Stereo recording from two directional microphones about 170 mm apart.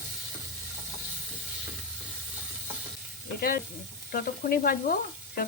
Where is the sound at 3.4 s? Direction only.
60° left (ahead or behind).